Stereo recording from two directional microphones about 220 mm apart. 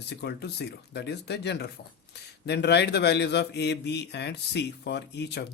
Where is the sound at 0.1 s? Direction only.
50° left (ahead or behind).